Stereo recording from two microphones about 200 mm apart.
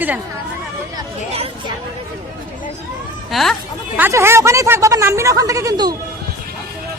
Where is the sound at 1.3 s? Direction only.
30° right (ahead or behind).